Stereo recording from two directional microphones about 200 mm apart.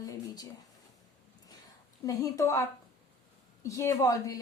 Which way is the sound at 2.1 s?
15° left (ahead or behind).